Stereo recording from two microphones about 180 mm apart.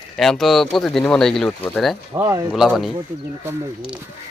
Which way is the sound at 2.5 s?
Centre (ahead or behind).